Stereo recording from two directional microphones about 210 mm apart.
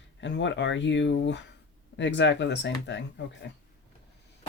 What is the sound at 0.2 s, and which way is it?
Speech, 60° left (ahead or behind).